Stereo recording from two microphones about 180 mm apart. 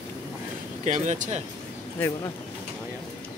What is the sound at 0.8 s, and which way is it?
Speech, 40° right (ahead or behind).